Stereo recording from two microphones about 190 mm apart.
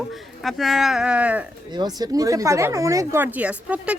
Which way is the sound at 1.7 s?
20° right (ahead or behind).